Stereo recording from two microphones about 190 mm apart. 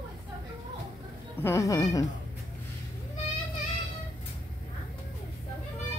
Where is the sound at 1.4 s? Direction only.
15° left (ahead or behind).